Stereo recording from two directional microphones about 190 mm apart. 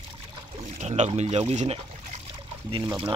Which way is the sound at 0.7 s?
35° right (ahead or behind).